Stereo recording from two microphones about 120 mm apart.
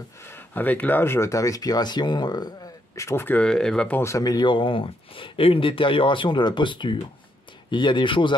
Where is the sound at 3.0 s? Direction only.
20° left (ahead or behind).